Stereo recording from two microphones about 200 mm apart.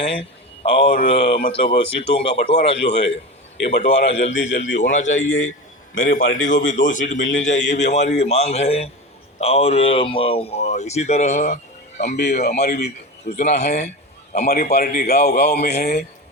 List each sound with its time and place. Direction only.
0.0 s a man's voice: 30° left (ahead or behind)
12.1 s speech: 55° left (ahead or behind)
13.3 s speech: 35° left (ahead or behind)
15.8 s speech: 50° left (ahead or behind)